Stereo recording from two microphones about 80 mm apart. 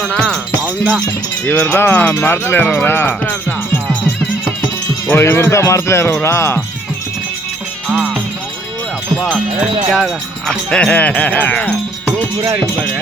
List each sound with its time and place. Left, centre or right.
0.1 s wind chime: centre
1.5 s speech: centre
5.1 s speech: left
9.9 s speech: centre
10.7 s speech: centre